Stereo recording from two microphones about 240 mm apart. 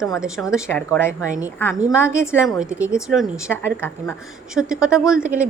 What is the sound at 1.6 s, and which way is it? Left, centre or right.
Speech, centre.